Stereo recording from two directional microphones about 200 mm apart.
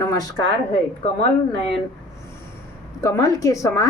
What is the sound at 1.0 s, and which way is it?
Speech, 30° left (ahead or behind).